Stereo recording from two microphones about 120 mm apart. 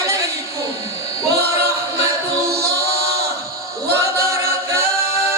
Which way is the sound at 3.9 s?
25° right (ahead or behind).